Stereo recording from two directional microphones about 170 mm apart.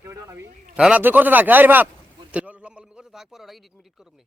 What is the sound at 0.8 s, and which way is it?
A man's voice, 5° right (ahead or behind).